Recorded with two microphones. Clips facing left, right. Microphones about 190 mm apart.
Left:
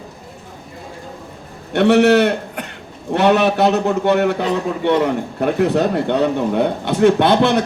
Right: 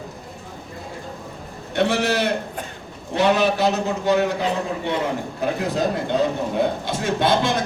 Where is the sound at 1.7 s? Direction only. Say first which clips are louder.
Left 9 dB; 60° left (ahead or behind).